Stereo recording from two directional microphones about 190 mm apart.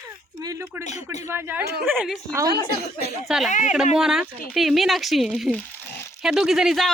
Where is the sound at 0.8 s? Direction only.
35° left (ahead or behind).